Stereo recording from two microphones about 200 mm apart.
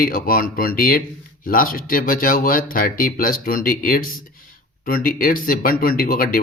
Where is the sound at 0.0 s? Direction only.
45° left (ahead or behind).